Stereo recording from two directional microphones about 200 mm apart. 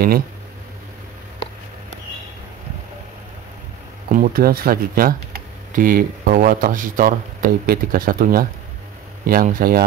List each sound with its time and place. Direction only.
4.1 s speech: 45° right (ahead or behind)